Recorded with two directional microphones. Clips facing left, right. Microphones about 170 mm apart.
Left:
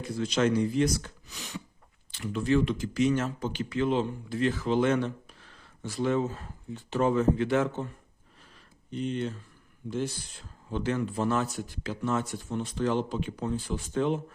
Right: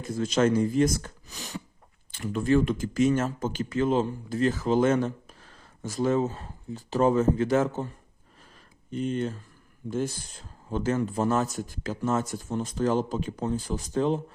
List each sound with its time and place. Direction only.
0.0 s speech: 45° right (ahead or behind)
8.5 s a sound: 45° right (ahead or behind)
9.9 s speech: 45° right (ahead or behind)